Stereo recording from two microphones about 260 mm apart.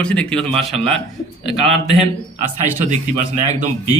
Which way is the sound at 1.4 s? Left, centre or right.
Right.